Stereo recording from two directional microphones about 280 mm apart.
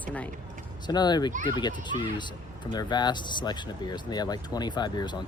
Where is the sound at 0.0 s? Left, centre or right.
Centre.